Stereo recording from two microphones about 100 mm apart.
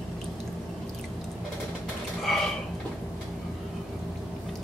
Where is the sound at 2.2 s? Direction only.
5° left (ahead or behind).